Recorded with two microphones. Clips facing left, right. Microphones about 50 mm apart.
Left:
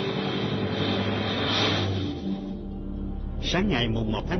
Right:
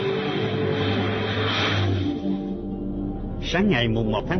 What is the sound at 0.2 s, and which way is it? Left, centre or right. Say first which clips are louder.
Vehicle: right 4 dB; right.